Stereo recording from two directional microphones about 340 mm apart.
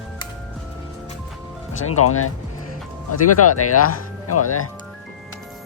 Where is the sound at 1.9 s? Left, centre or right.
Left.